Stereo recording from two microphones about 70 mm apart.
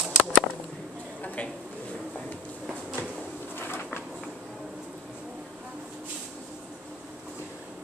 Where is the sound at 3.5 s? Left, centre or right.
Left.